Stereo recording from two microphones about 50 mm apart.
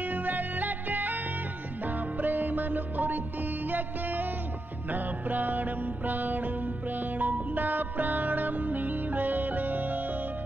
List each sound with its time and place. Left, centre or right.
0.1 s music: right
2.2 s music: right